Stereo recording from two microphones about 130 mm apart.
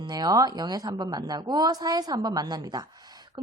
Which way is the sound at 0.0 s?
30° right (ahead or behind).